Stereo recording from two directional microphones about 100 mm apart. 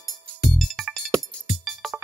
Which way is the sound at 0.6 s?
Centre (ahead or behind).